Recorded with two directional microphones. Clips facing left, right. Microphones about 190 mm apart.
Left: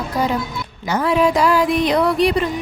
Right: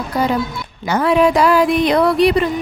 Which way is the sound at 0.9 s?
65° right (ahead or behind).